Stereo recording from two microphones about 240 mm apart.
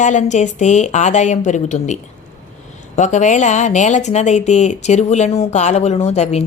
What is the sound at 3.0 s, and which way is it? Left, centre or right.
Speech, left.